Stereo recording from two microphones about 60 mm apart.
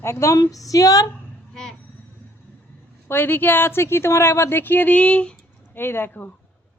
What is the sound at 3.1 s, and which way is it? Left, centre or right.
A woman's voice, left.